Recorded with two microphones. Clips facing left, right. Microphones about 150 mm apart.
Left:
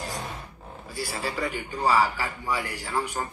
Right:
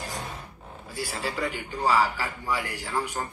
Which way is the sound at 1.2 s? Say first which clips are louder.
Even; 15° left (ahead or behind).